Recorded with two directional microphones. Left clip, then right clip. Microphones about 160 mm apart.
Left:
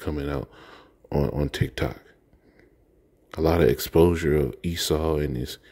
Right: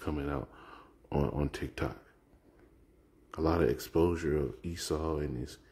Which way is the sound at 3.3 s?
45° left (ahead or behind).